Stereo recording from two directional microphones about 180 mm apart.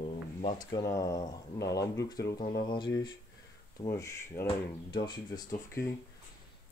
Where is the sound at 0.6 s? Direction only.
20° left (ahead or behind).